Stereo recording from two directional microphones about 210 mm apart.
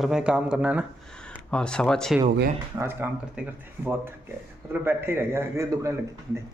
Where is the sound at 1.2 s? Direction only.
5° left (ahead or behind).